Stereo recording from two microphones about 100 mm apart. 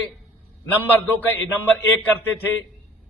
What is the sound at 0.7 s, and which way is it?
A man's voice, 20° left (ahead or behind).